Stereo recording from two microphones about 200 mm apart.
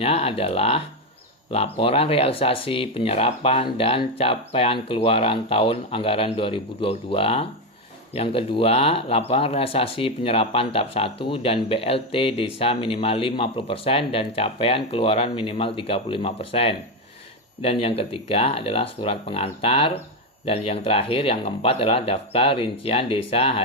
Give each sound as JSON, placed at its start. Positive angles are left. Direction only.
{"t": 0.0, "sound": "speech", "side_deg": 30}